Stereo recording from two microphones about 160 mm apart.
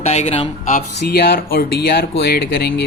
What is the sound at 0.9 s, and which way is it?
Speech, 90° left.